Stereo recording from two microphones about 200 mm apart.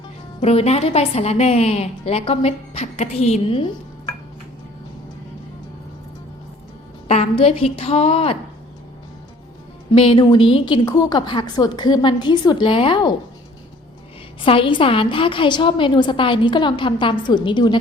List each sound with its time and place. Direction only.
0.4 s a woman's voice: 30° left (ahead or behind)
7.1 s a woman's voice: 30° left (ahead or behind)
9.9 s a woman's voice: 25° left (ahead or behind)
14.4 s a woman's voice: 25° left (ahead or behind)